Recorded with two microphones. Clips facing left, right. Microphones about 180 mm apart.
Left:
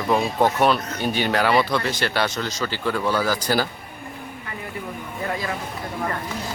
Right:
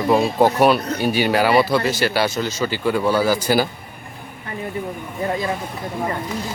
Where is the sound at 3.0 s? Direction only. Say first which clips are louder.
Right 4 dB; 25° right (ahead or behind).